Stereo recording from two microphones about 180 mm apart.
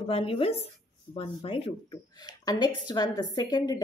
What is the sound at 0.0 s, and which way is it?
Speech, 30° left (ahead or behind).